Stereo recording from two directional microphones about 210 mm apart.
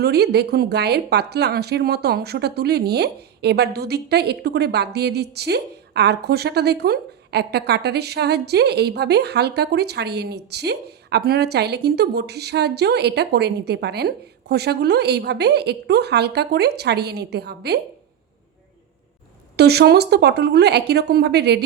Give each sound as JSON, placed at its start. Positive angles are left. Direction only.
{"t": 0.0, "sound": "a woman's voice", "side_deg": -50}
{"t": 19.5, "sound": "a woman's voice", "side_deg": -50}